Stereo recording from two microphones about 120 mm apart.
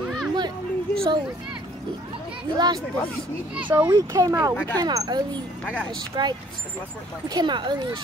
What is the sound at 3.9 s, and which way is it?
Speech, 30° right (ahead or behind).